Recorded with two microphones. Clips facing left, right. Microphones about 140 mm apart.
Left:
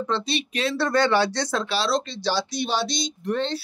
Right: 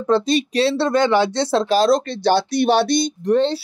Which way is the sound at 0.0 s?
45° right (ahead or behind).